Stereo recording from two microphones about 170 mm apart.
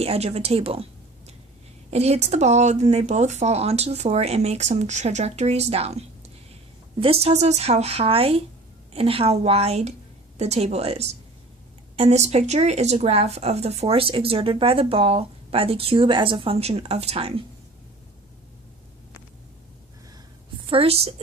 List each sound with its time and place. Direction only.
0.0 s speech: 35° right (ahead or behind)
1.9 s speech: 40° right (ahead or behind)
20.7 s speech: 35° right (ahead or behind)